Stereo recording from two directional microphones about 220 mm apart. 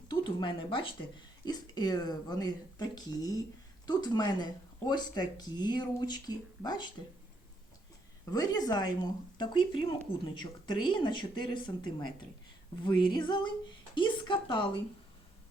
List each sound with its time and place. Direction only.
0.1 s a woman's voice: 20° left (ahead or behind)
8.3 s a woman's voice: 15° left (ahead or behind)